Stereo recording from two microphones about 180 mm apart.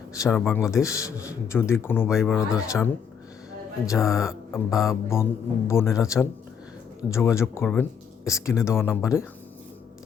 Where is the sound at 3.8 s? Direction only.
15° left (ahead or behind).